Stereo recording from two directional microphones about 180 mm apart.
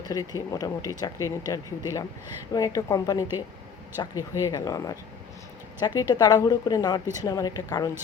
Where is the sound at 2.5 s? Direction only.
20° left (ahead or behind).